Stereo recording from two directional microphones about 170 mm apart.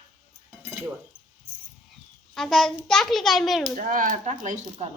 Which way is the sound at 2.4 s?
Centre (ahead or behind).